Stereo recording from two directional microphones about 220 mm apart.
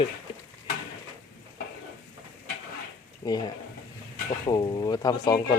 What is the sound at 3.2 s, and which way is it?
Speech, 15° left (ahead or behind).